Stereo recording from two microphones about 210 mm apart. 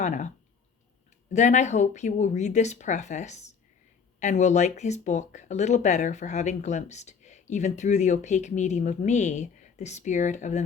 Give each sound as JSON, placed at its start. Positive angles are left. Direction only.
{"t": 0.0, "sound": "speech", "side_deg": 35}
{"t": 1.3, "sound": "speech", "side_deg": 35}